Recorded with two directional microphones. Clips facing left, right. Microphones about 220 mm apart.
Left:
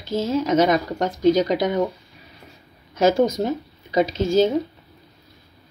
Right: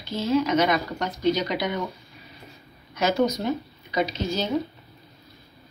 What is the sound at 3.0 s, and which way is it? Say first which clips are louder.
Speech: left 5 dB; 45° left (ahead or behind).